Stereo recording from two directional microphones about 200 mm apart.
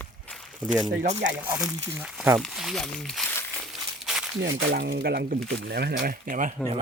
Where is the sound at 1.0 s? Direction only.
35° right (ahead or behind).